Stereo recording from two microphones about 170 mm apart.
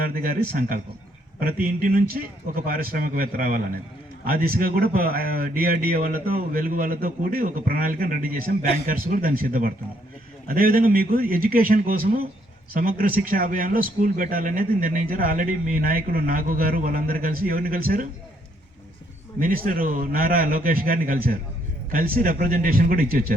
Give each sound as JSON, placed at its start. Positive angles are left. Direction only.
{"t": 0.0, "sound": "speech", "side_deg": -60}
{"t": 19.4, "sound": "speech", "side_deg": -55}